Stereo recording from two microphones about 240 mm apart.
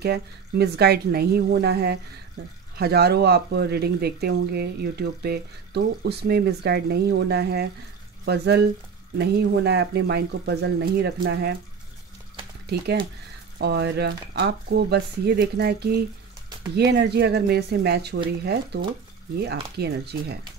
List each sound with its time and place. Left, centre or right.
0.0 s speech: right
12.6 s speech: right